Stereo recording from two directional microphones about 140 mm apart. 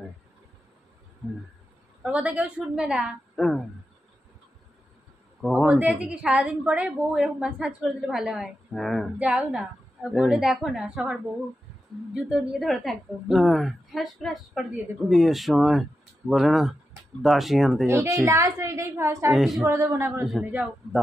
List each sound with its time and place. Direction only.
2.0 s a woman's voice: 10° right (ahead or behind)
5.4 s a man's voice: centre (ahead or behind)
9.3 s a woman's voice: 10° right (ahead or behind)
17.8 s a woman's voice: 20° right (ahead or behind)
19.3 s a woman's voice: centre (ahead or behind)
19.6 s a woman's voice: 20° right (ahead or behind)
20.2 s a woman's voice: 5° right (ahead or behind)